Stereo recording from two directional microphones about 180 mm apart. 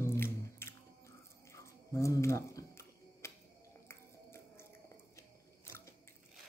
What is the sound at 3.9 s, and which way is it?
Music, 15° left (ahead or behind).